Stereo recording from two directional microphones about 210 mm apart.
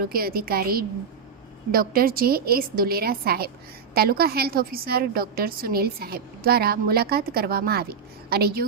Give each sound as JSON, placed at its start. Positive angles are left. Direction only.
{"t": 0.0, "sound": "a woman's voice", "side_deg": -45}